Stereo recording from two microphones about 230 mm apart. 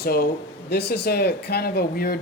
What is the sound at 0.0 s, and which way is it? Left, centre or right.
Speech, left.